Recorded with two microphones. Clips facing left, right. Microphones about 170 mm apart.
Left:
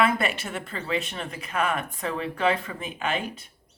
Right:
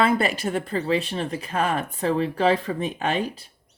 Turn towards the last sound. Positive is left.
turn(degrees=-35)  # may be behind; listen again after turning